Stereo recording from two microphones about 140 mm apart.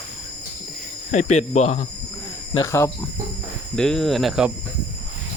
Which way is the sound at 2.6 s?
20° left (ahead or behind).